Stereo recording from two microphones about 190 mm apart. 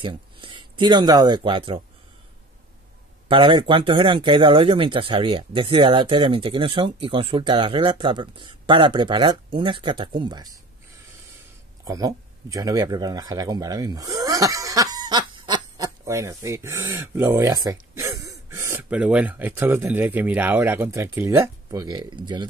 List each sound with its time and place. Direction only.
0.0 s speech: 25° right (ahead or behind)
3.3 s speech: 25° right (ahead or behind)
11.8 s speech: 20° right (ahead or behind)